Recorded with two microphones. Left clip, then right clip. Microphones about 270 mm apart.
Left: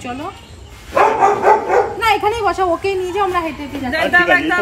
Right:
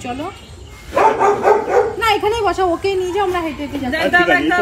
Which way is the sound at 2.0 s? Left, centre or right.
Centre.